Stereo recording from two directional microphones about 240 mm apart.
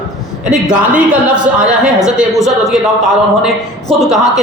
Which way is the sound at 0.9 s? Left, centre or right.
Centre.